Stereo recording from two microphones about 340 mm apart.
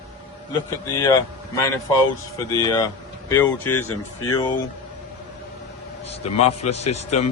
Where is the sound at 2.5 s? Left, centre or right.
Centre.